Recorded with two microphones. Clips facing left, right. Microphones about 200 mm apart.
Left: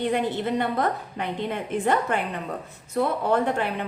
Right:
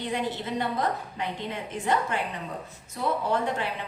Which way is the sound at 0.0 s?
55° left (ahead or behind).